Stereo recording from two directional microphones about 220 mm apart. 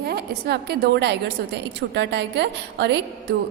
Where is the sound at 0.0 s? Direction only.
45° right (ahead or behind).